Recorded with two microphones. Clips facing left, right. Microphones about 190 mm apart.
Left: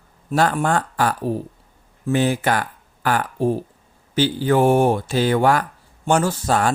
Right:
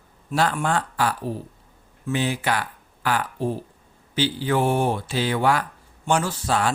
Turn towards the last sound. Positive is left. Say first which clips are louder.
# left 4 dB
turn(degrees=45)  # may be behind; listen again after turning